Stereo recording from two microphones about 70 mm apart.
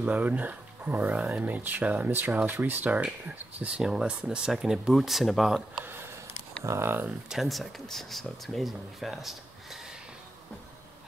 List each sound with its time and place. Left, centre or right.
0.0 s speech: right
1.1 s speech: centre
1.4 s speech: right; by 5.5 s centre
6.6 s speech: right
7.2 s speech: centre